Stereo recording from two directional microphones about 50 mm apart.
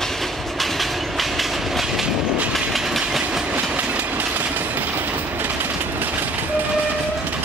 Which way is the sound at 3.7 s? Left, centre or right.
Right.